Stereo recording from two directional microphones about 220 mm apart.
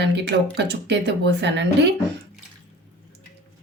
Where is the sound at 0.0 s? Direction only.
50° right (ahead or behind).